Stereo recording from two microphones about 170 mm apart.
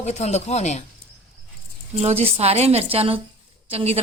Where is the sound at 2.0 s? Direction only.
35° right (ahead or behind).